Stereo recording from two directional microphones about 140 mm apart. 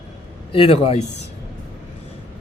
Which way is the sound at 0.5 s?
40° left (ahead or behind).